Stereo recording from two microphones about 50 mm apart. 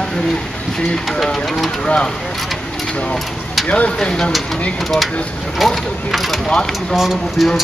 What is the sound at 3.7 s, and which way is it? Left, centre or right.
Speech, left.